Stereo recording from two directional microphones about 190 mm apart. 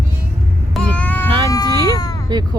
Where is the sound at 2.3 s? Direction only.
20° right (ahead or behind).